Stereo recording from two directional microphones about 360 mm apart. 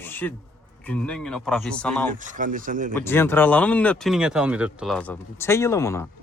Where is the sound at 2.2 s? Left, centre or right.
Right.